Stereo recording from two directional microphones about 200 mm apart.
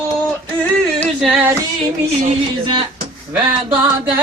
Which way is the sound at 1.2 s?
Centre (ahead or behind).